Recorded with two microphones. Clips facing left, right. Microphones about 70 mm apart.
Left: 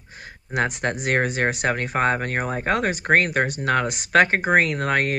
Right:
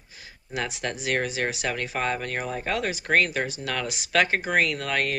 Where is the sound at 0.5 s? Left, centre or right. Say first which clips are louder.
Left 6 dB; left.